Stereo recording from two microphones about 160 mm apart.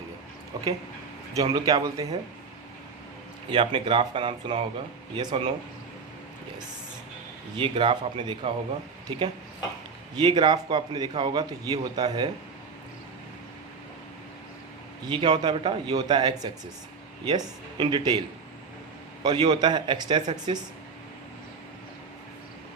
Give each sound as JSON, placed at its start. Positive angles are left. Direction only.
{"t": 0.5, "sound": "a man's voice", "side_deg": -25}
{"t": 3.5, "sound": "a man's voice", "side_deg": -30}
{"t": 7.5, "sound": "a man's voice", "side_deg": -30}
{"t": 15.0, "sound": "a man's voice", "side_deg": -30}